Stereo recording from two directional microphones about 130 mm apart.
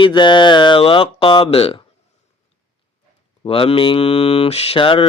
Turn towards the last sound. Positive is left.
turn(degrees=40)  # may be behind; listen again after turning